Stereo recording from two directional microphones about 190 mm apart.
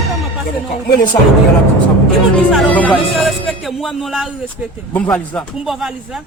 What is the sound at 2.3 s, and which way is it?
Speech, 5° left (ahead or behind).